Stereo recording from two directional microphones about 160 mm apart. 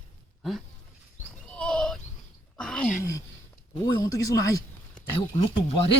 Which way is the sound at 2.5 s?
5° left (ahead or behind).